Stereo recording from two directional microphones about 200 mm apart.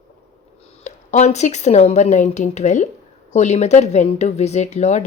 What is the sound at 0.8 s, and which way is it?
Speech, 35° left (ahead or behind).